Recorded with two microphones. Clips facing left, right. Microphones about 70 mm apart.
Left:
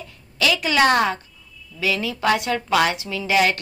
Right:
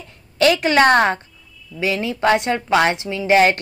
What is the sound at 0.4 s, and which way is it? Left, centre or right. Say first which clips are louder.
Speech: right 4 dB; right.